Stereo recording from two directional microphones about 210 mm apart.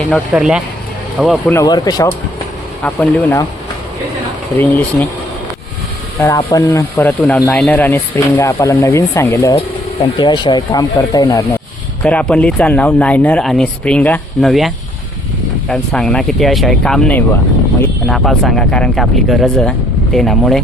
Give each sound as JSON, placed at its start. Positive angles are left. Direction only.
{"t": 0.0, "sound": "speech", "side_deg": 0}
{"t": 1.5, "sound": "speech", "side_deg": 20}
{"t": 2.8, "sound": "speech", "side_deg": 5}
{"t": 4.5, "sound": "speech", "side_deg": 10}
{"t": 6.1, "sound": "speech", "side_deg": 15}
{"t": 9.6, "sound": "speech", "side_deg": 25}
{"t": 12.0, "sound": "speech", "side_deg": 5}
{"t": 15.7, "sound": "speech", "side_deg": 5}